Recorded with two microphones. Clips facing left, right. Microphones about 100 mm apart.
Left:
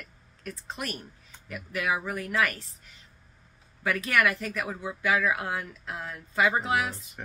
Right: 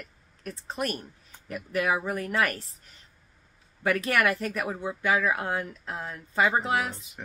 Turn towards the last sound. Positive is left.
turn(degrees=-30)  # may be behind; listen again after turning